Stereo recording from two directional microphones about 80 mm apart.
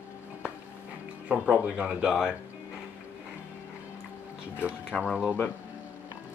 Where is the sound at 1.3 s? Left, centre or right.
Centre.